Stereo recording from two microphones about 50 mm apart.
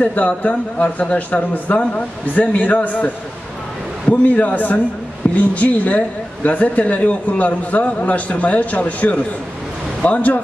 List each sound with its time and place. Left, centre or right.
0.0 s a woman's voice: left
4.1 s a man's voice: left